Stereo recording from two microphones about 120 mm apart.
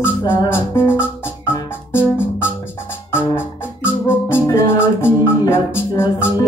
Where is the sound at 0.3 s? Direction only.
20° left (ahead or behind).